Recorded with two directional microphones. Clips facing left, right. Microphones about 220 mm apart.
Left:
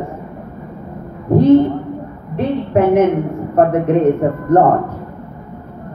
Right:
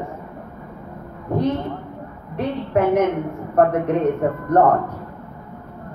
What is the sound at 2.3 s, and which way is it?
A woman's voice, 25° left (ahead or behind).